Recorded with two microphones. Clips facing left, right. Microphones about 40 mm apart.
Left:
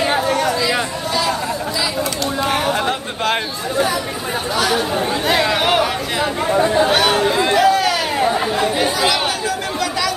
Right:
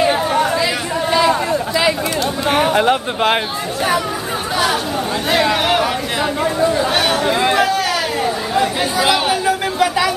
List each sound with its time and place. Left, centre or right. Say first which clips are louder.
2.5 s speech: right 8 dB; right
5.3 s speech: right 2 dB; centre
7.2 s chatter: right 1 dB; centre
9.0 s chatter: right 3 dB; centre